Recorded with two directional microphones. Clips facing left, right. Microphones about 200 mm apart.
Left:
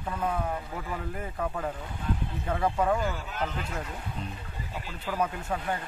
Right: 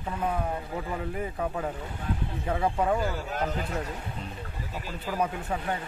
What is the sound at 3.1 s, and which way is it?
Speech, 40° right (ahead or behind).